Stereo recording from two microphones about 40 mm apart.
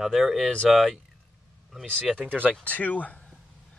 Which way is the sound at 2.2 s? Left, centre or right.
Left.